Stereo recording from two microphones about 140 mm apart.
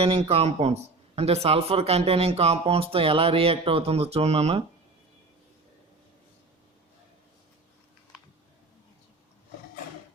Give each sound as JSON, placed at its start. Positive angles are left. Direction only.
{"t": 0.0, "sound": "speech", "side_deg": -45}